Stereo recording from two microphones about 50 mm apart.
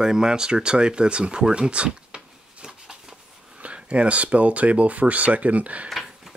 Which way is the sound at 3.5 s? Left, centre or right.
Right.